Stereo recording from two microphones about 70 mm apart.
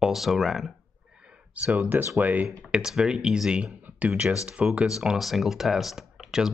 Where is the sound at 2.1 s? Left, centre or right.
Right.